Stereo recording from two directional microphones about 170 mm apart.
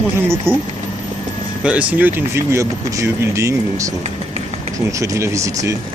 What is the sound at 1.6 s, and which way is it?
Speech, 10° right (ahead or behind).